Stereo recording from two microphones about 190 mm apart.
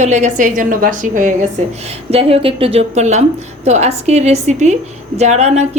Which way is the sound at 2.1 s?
30° right (ahead or behind).